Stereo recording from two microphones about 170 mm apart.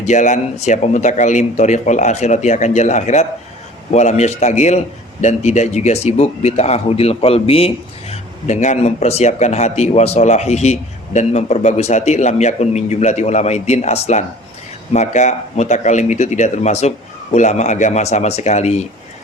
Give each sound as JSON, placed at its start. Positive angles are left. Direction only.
{"t": 0.0, "sound": "speech", "side_deg": 45}